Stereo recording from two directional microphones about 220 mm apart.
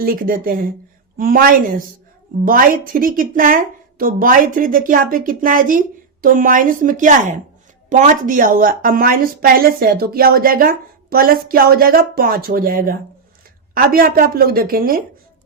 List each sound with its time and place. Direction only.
0.0 s a woman's voice: 40° right (ahead or behind)